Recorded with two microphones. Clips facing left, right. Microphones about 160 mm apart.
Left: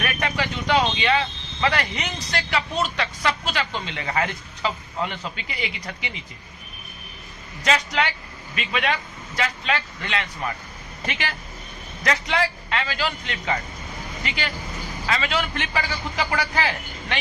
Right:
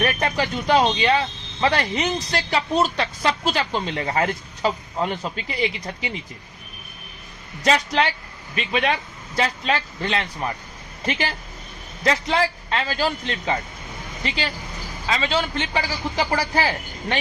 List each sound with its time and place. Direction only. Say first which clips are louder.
0.0 s speech: right 4 dB; 30° right (ahead or behind)
7.6 s speech: right 3 dB; 35° right (ahead or behind)